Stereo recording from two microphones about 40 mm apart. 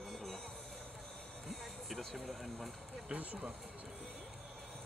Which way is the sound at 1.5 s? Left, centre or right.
Centre.